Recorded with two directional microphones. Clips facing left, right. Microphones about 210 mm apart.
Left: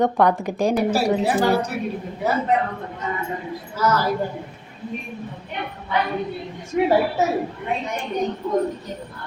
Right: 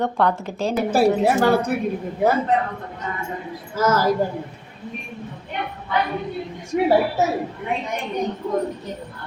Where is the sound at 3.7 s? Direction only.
45° right (ahead or behind).